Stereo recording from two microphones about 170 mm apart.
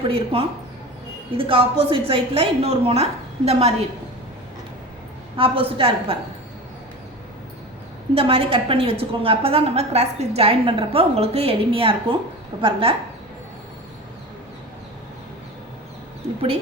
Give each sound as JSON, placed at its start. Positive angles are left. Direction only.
{"t": 0.1, "sound": "a woman's voice", "side_deg": -30}
{"t": 5.4, "sound": "a woman's voice", "side_deg": -30}
{"t": 8.1, "sound": "a woman's voice", "side_deg": -35}